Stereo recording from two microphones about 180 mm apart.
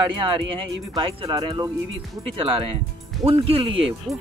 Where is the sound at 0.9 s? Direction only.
25° right (ahead or behind).